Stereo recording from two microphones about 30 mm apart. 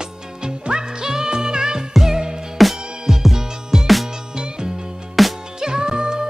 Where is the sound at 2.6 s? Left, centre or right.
Centre.